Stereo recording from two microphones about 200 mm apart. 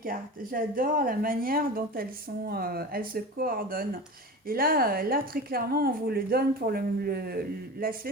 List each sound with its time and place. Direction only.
0.0 s a woman's voice: 45° right (ahead or behind)